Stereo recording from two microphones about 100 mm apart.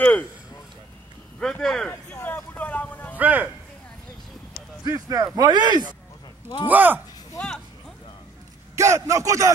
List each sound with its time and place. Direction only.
0.0 s speech: 15° left (ahead or behind)
1.4 s speech: 5° left (ahead or behind)
2.2 s vehicle: 20° left (ahead or behind)
3.2 s speech: 15° right (ahead or behind)
4.8 s speech: 35° right (ahead or behind)
6.7 s speech: 15° right (ahead or behind)
7.3 s a sound: 10° left (ahead or behind)
8.7 s speech: 30° right (ahead or behind)